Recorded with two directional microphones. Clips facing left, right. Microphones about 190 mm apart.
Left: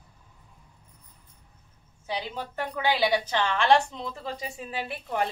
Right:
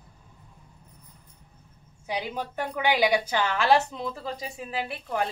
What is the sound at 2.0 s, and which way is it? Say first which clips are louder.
A woman's voice: right 2 dB; 15° right (ahead or behind).